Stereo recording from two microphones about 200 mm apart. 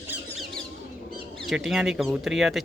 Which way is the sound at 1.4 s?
Centre (ahead or behind).